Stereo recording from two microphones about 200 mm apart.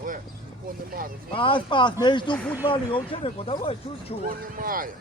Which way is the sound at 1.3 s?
25° left (ahead or behind).